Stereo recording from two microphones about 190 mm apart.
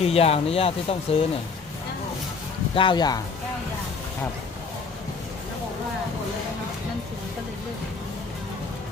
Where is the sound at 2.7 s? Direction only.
25° left (ahead or behind).